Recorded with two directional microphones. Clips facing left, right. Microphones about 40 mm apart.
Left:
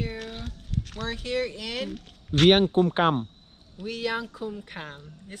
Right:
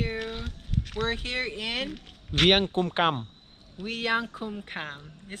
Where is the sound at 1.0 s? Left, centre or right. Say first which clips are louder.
Left 2 dB; right.